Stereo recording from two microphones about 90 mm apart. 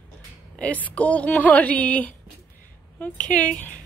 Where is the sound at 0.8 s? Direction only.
15° left (ahead or behind).